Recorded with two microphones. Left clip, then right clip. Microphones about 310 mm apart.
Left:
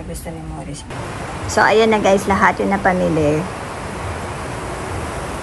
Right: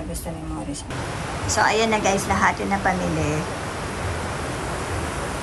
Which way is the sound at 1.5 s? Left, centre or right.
Centre.